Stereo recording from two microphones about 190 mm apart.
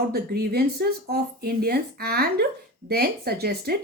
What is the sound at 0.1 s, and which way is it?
Speech, 55° right (ahead or behind).